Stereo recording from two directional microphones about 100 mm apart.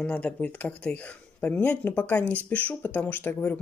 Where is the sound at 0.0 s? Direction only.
15° left (ahead or behind).